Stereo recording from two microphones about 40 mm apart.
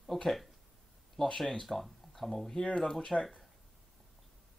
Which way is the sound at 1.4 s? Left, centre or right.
Centre.